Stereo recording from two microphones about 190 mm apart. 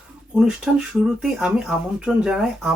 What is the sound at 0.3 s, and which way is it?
Speech, 5° right (ahead or behind).